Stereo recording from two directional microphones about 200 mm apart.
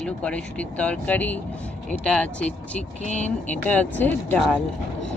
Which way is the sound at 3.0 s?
35° left (ahead or behind).